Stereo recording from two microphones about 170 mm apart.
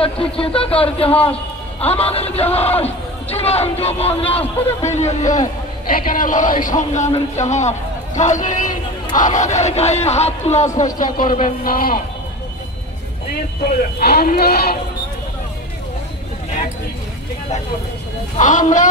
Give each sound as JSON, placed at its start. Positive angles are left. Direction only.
{"t": 0.0, "sound": "speech", "side_deg": 35}
{"t": 4.1, "sound": "a man's voice", "side_deg": 10}
{"t": 4.8, "sound": "speech", "side_deg": 40}
{"t": 5.9, "sound": "speech", "side_deg": 55}
{"t": 10.8, "sound": "speech", "side_deg": 50}
{"t": 13.9, "sound": "speech", "side_deg": 65}
{"t": 18.4, "sound": "speech", "side_deg": 50}